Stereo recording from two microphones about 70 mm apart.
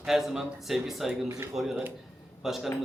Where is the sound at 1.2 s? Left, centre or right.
Right.